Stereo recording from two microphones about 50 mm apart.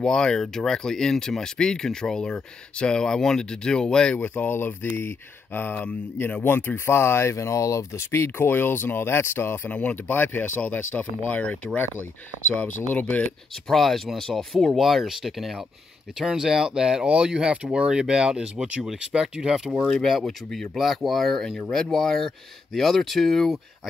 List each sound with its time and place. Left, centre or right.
0.0 s speech: centre
4.2 s speech: left
7.0 s speech: left
9.7 s speech: left
12.9 s speech: left
13.7 s speech: centre
19.9 s speech: centre